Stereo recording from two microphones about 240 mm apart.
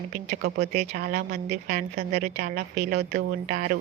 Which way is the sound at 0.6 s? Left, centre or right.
Right.